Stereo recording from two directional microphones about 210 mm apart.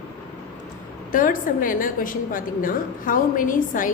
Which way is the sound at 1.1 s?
40° left (ahead or behind).